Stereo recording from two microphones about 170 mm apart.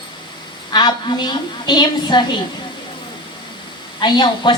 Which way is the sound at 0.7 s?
25° left (ahead or behind).